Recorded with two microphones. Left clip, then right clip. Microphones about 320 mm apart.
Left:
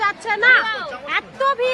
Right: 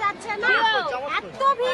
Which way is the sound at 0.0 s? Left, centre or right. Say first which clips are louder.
Left 7 dB; centre.